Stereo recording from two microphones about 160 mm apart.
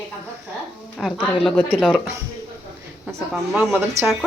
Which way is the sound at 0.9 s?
Centre (ahead or behind).